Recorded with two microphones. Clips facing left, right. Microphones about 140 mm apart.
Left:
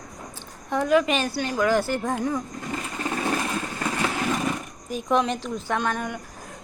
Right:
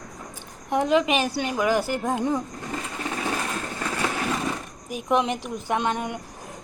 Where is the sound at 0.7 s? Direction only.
20° right (ahead or behind).